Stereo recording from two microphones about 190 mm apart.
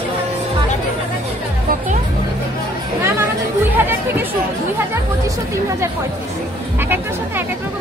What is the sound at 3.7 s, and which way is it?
Music, 10° right (ahead or behind).